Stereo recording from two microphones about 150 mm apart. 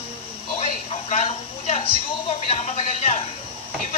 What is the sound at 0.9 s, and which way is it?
A woman's voice, 40° left (ahead or behind).